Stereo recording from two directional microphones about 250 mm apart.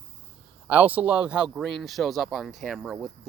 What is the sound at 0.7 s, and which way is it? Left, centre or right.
Speech, centre.